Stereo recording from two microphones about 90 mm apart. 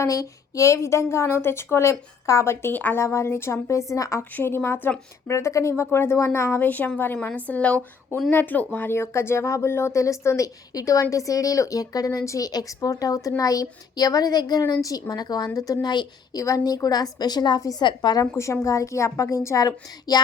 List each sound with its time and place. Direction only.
0.0 s speech: 40° left (ahead or behind); by 3.0 s 20° left (ahead or behind)
3.0 s speech: 35° left (ahead or behind)
4.2 s a woman's voice: 25° left (ahead or behind); by 16.4 s 50° left (ahead or behind)
16.4 s a woman's voice: 40° left (ahead or behind)
17.6 s speech: 40° left (ahead or behind)
17.8 s a woman's voice: 55° left (ahead or behind)
18.2 s speech: 30° left (ahead or behind)